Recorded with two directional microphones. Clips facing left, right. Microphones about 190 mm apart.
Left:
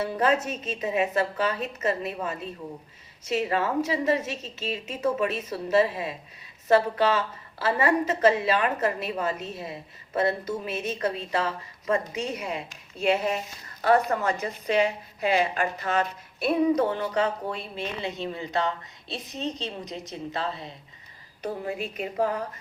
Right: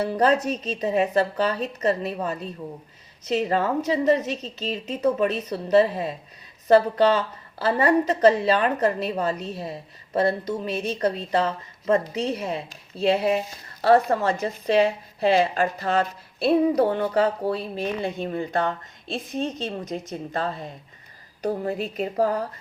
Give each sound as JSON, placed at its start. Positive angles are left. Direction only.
{"t": 0.0, "sound": "a woman's voice", "side_deg": -35}
{"t": 4.1, "sound": "a woman's voice", "side_deg": 5}
{"t": 4.5, "sound": "a woman's voice", "side_deg": -35}